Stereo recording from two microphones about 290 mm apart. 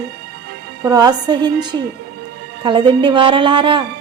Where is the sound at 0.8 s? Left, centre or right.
Centre.